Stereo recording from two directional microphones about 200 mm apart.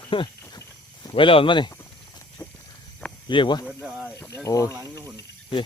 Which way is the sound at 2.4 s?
20° left (ahead or behind).